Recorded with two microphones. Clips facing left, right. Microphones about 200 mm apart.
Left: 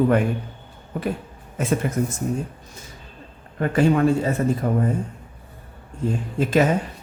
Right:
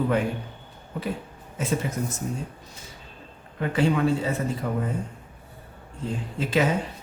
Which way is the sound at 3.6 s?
50° left (ahead or behind).